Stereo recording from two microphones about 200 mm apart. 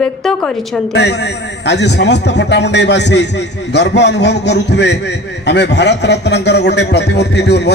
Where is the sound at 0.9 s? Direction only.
60° left (ahead or behind).